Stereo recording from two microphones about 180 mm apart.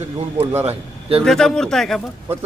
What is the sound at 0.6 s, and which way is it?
Speech, 35° right (ahead or behind).